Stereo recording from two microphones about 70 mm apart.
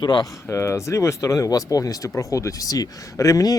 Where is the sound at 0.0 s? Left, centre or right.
Left.